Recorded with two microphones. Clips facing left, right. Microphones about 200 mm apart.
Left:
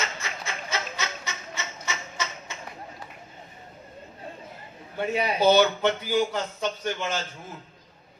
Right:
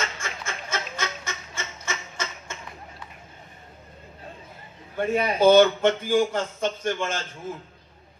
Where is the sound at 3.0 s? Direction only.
40° left (ahead or behind).